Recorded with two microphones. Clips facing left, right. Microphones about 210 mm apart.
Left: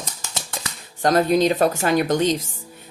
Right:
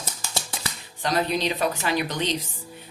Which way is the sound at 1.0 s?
50° left (ahead or behind).